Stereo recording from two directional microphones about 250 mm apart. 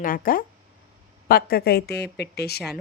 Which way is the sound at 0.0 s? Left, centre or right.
Left.